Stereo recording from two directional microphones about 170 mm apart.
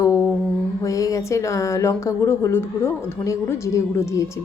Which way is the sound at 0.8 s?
20° left (ahead or behind).